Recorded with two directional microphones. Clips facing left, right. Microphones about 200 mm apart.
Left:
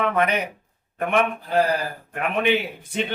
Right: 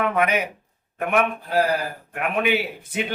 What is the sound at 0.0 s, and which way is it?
A man's voice, 5° right (ahead or behind).